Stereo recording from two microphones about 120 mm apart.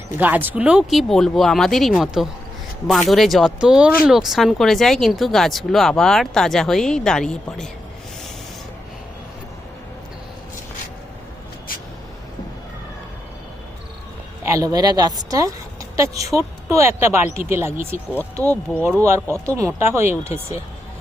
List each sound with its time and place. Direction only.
0.2 s speech: 15° right (ahead or behind); by 7.7 s 5° left (ahead or behind)
14.4 s speech: 25° right (ahead or behind)
18.4 s speech: 15° left (ahead or behind)
19.0 s speech: 20° right (ahead or behind)